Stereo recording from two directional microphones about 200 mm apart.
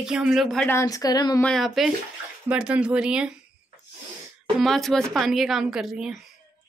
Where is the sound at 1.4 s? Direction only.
Centre (ahead or behind).